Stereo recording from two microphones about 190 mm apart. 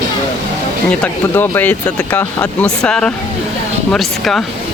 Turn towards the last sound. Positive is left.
turn(degrees=5)  # may be behind; listen again after turning